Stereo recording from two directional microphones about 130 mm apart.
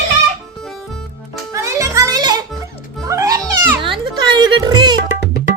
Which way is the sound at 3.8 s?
40° right (ahead or behind).